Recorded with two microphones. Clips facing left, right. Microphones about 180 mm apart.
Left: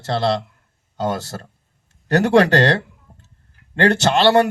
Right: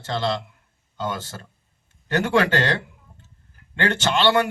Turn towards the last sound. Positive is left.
turn(degrees=40)  # may be behind; listen again after turning